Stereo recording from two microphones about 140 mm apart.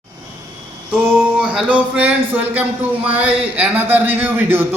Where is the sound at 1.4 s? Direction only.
5° right (ahead or behind).